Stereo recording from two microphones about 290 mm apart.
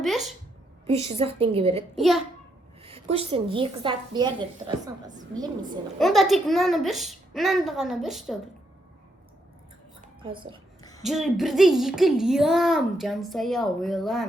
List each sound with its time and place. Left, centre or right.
0.0 s a sound: centre
0.9 s a woman's voice: centre
2.0 s speech: centre
2.8 s a woman's voice: centre
6.0 s speech: centre
10.0 s a sound: centre
11.1 s speech: centre